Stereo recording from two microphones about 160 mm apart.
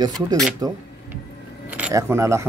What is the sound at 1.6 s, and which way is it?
Keys jangling, 10° right (ahead or behind).